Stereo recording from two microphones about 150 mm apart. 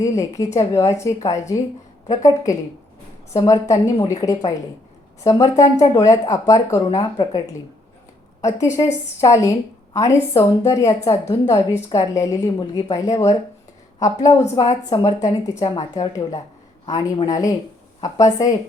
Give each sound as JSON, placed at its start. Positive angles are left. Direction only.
{"t": 0.0, "sound": "a woman's voice", "side_deg": 20}
{"t": 8.5, "sound": "a woman's voice", "side_deg": 20}